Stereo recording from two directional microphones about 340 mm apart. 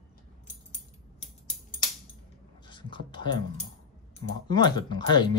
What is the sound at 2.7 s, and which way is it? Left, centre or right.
A man's voice, centre.